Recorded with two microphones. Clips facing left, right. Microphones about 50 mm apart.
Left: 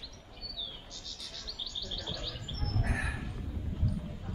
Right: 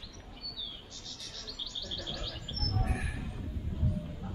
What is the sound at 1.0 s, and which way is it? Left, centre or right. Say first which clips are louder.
Chirp: right 1 dB; centre.